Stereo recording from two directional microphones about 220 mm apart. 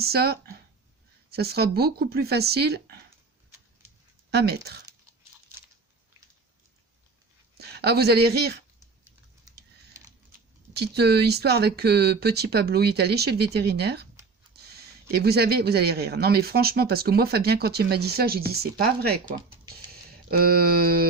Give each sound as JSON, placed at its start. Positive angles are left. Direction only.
{"t": 0.0, "sound": "speech", "side_deg": -45}
{"t": 4.3, "sound": "speech", "side_deg": -45}
{"t": 7.6, "sound": "speech", "side_deg": -45}
{"t": 10.8, "sound": "speech", "side_deg": -45}
{"t": 14.5, "sound": "a sound", "side_deg": -45}
{"t": 15.1, "sound": "speech", "side_deg": -45}